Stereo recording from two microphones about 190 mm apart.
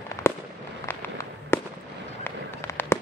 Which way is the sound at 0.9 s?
10° left (ahead or behind).